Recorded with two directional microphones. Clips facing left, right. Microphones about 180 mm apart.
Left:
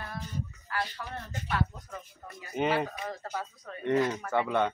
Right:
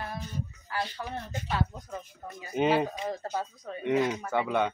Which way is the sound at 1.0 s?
30° right (ahead or behind).